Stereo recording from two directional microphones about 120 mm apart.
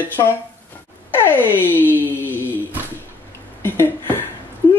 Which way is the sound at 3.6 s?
20° left (ahead or behind).